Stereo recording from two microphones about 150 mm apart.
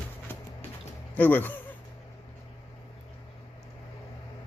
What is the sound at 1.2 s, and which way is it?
Speech, 10° left (ahead or behind).